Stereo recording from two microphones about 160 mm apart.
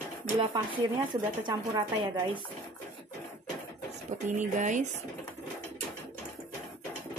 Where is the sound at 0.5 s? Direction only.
30° right (ahead or behind).